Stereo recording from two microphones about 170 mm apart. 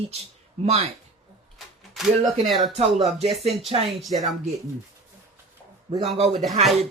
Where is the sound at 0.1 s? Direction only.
35° right (ahead or behind).